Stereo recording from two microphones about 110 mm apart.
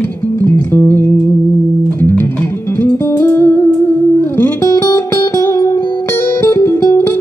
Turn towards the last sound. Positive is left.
turn(degrees=25)  # may be behind; listen again after turning